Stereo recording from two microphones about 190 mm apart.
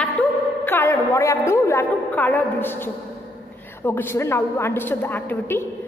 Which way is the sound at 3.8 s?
10° left (ahead or behind).